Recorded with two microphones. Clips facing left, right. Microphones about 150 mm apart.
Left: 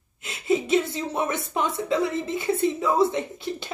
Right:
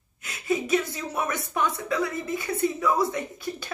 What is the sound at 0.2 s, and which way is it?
A woman's voice, 25° left (ahead or behind).